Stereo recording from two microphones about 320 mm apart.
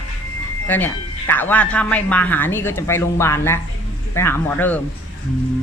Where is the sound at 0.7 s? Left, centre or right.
Centre.